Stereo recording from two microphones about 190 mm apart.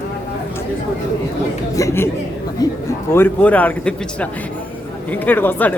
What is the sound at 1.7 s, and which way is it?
A man's voice, 15° left (ahead or behind).